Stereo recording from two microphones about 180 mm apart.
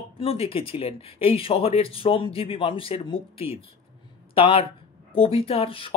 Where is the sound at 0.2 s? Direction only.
30° left (ahead or behind).